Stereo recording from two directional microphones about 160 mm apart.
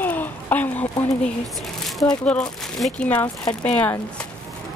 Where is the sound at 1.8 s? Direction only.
Centre (ahead or behind).